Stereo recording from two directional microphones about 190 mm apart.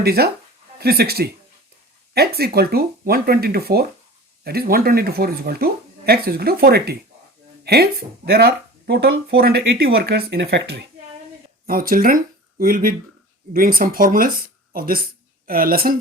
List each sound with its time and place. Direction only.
0.0 s speech: 55° right (ahead or behind)
11.6 s speech: 50° right (ahead or behind)